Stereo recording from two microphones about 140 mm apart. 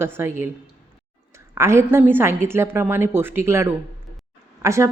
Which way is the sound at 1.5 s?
20° right (ahead or behind).